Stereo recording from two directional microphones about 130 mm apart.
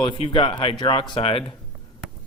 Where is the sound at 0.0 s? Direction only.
40° left (ahead or behind).